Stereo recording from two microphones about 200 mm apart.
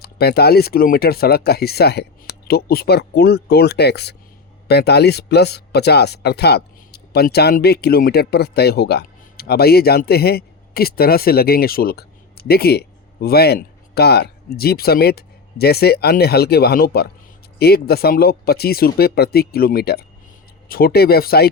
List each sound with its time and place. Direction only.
0.0 s speech: 50° left (ahead or behind)